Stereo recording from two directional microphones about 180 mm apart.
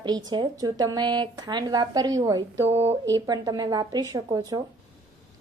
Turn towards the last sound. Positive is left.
turn(degrees=-20)  # may be behind; listen again after turning